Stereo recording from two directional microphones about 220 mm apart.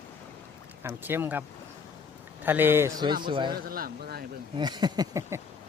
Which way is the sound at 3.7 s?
45° right (ahead or behind).